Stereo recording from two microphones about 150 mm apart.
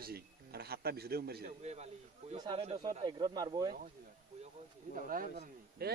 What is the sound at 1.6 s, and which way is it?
Speech, 45° right (ahead or behind).